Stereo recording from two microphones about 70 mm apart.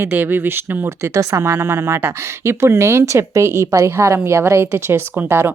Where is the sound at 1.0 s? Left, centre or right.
Right.